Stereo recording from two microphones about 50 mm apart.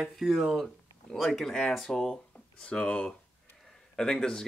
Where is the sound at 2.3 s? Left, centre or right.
Left.